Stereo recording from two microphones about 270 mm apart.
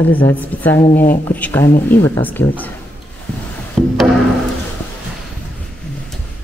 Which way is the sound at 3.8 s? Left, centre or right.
Centre.